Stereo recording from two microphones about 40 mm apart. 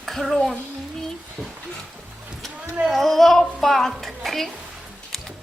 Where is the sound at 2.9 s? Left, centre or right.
Centre.